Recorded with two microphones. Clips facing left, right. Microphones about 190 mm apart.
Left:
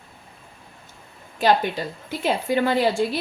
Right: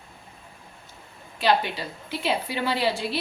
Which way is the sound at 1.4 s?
45° left (ahead or behind).